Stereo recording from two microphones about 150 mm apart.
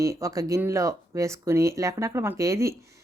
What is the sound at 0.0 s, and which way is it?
A woman's voice, 20° right (ahead or behind).